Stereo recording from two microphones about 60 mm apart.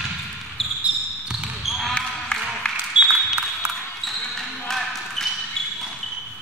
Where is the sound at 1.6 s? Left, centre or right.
Centre.